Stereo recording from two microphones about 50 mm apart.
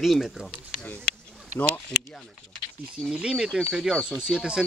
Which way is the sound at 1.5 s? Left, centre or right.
Left.